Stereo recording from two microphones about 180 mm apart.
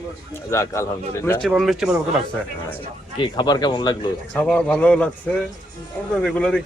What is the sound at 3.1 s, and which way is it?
Speech, 25° left (ahead or behind).